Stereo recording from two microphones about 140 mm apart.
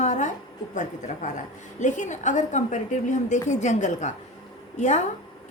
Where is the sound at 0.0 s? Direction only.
60° left (ahead or behind).